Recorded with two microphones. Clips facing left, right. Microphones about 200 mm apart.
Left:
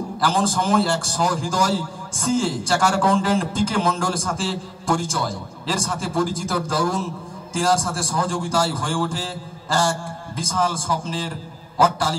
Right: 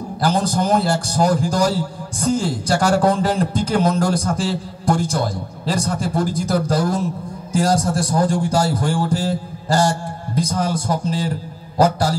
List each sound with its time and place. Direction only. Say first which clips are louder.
0.2 s a man's voice: right 3 dB; 40° right (ahead or behind)